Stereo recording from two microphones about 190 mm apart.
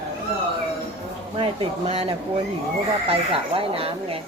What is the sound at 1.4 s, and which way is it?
Speech, 30° right (ahead or behind).